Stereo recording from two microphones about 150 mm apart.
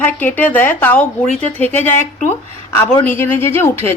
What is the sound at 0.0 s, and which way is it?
Speech, 10° left (ahead or behind).